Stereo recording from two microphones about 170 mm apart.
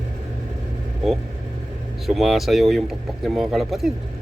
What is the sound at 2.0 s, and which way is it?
Speech, centre (ahead or behind).